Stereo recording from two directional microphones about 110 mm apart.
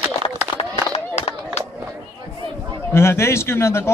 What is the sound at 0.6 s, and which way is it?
Run, 70° left (ahead or behind).